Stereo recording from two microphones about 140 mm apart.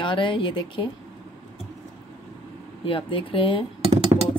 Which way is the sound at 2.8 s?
40° left (ahead or behind).